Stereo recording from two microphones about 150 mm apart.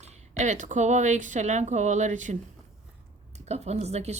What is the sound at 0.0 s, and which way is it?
A woman's voice, 50° right (ahead or behind).